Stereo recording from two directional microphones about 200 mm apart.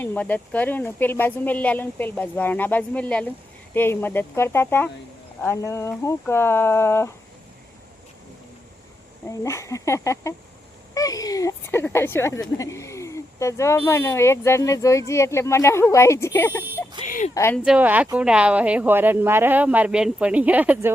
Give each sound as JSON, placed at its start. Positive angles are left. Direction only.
{"t": 0.0, "sound": "speech", "side_deg": 10}
{"t": 9.2, "sound": "speech", "side_deg": 15}
{"t": 17.1, "sound": "a sound", "side_deg": 40}
{"t": 17.3, "sound": "speech", "side_deg": 15}
{"t": 17.6, "sound": "speech", "side_deg": -5}